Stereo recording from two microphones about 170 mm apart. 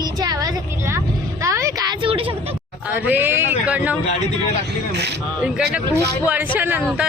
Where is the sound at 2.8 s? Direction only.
10° right (ahead or behind).